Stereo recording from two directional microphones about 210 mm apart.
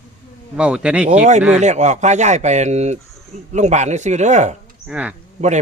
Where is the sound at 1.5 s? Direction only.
35° right (ahead or behind).